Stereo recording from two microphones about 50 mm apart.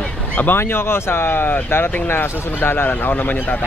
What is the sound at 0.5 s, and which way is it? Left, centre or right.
A man's voice, left.